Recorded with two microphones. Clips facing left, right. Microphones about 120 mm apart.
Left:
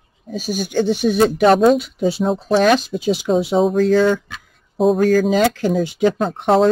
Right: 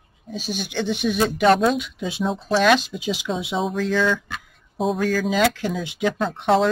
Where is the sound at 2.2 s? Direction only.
50° left (ahead or behind).